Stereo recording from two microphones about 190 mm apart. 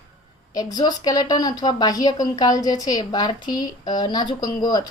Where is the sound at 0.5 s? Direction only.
20° left (ahead or behind).